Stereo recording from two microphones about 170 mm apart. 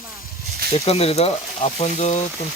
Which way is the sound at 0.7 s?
35° left (ahead or behind).